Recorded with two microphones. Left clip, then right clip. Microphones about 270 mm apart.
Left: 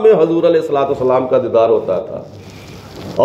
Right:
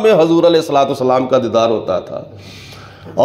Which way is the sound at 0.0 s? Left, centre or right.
Right.